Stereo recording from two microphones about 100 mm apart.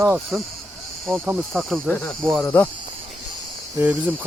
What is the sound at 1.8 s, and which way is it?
Speech, 15° left (ahead or behind).